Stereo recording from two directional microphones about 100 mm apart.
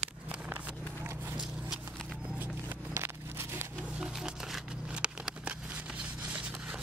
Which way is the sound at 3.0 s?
25° right (ahead or behind).